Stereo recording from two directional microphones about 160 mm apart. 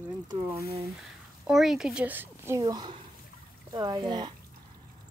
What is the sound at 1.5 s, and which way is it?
A woman's voice, 5° right (ahead or behind).